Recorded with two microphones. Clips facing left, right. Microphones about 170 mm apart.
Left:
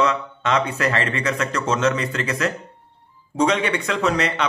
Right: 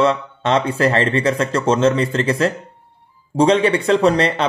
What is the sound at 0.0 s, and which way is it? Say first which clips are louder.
Speech: right 4 dB; 30° right (ahead or behind).